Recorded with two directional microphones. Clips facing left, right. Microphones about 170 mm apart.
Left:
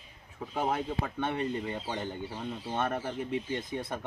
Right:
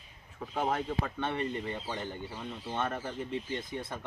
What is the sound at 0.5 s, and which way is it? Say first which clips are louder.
Speech: even; 10° left (ahead or behind).